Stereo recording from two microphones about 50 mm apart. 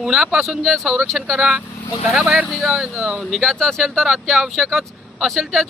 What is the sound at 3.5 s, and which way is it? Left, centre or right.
Speech, centre.